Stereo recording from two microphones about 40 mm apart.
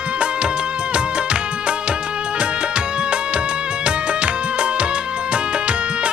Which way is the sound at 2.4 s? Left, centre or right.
Right.